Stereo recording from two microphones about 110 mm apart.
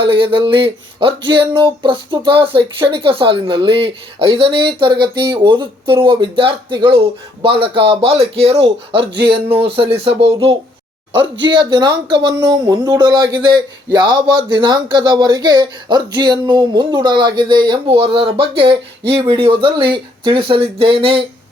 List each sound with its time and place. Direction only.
0.0 s a man's voice: 50° right (ahead or behind)
11.2 s speech: 45° right (ahead or behind)